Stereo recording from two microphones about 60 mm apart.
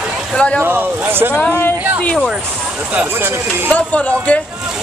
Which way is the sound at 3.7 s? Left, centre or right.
Left.